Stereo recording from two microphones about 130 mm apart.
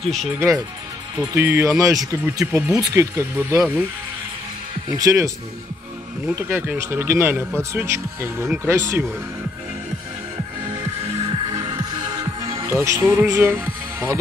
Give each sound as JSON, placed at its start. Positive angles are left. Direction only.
{"t": 0.0, "sound": "speech", "side_deg": 0}
{"t": 1.2, "sound": "speech", "side_deg": -20}
{"t": 4.9, "sound": "speech", "side_deg": -25}
{"t": 11.2, "sound": "music", "side_deg": -40}
{"t": 12.6, "sound": "speech", "side_deg": -20}